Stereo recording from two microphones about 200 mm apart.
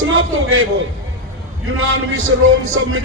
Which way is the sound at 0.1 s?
90° right.